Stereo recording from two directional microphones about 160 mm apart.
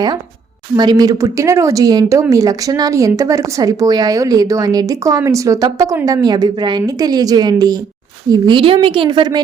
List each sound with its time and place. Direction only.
0.8 s a woman's voice: 25° right (ahead or behind)